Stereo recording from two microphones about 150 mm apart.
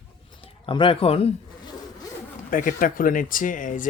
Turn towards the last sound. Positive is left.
turn(degrees=60)  # may be behind; listen again after turning